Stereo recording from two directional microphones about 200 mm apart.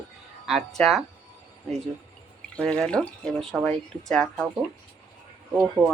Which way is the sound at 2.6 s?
5° left (ahead or behind).